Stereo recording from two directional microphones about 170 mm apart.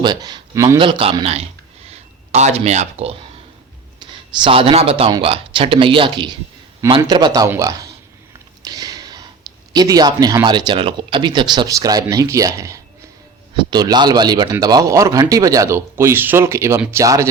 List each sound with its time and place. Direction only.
0.0 s a man's voice: 25° right (ahead or behind)
0.8 s speech: 30° right (ahead or behind)
8.6 s a sound: 20° right (ahead or behind)
9.7 s speech: 25° right (ahead or behind)